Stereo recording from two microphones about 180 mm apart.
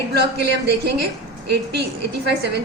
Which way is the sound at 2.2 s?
65° right (ahead or behind).